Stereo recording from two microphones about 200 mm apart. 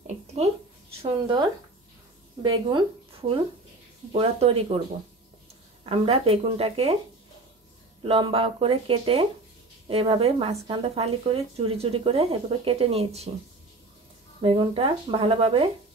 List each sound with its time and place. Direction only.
0.0 s a sound: 35° right (ahead or behind)
1.0 s speech: 20° right (ahead or behind)
2.4 s speech: 25° right (ahead or behind)
5.9 s speech: 30° right (ahead or behind)
8.0 s speech: 25° right (ahead or behind)
14.4 s speech: 25° right (ahead or behind)